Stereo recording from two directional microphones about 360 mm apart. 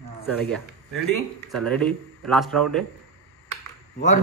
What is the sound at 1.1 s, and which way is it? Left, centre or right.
A man's voice, centre.